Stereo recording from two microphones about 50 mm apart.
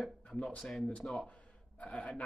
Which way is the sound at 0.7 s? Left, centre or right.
Centre.